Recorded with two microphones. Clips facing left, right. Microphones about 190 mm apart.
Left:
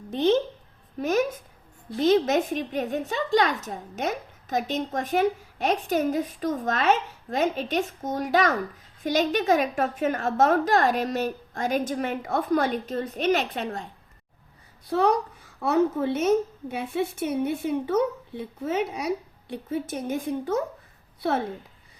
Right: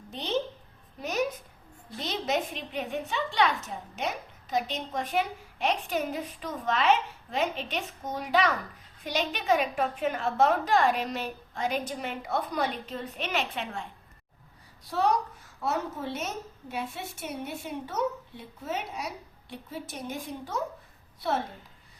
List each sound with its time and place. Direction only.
0.9 s a woman's voice: 50° left (ahead or behind)
14.8 s a woman's voice: 55° left (ahead or behind)